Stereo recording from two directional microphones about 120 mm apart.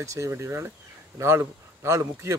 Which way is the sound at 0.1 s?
25° right (ahead or behind).